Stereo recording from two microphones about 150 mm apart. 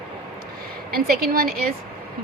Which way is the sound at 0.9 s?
90° right.